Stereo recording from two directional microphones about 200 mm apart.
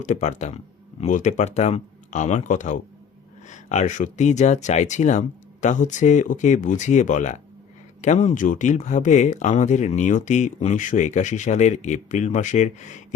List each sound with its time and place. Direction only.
0.0 s speech: 35° left (ahead or behind)